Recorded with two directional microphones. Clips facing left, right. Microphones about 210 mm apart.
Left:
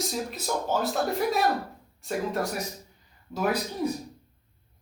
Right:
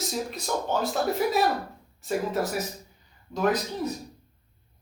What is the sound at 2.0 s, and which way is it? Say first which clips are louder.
Speech: right 2 dB; centre (ahead or behind).